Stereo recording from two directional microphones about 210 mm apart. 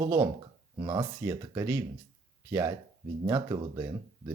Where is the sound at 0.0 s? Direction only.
10° right (ahead or behind).